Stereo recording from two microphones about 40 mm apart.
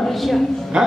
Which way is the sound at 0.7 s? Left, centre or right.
Centre.